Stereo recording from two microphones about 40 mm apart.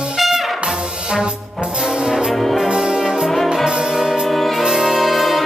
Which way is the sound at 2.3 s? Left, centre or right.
Centre.